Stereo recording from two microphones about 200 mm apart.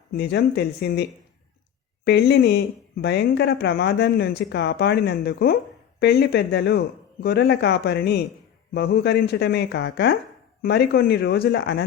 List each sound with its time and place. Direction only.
0.1 s speech: 55° left (ahead or behind)
2.0 s speech: 55° left (ahead or behind)